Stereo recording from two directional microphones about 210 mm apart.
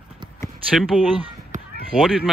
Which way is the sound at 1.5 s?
35° right (ahead or behind).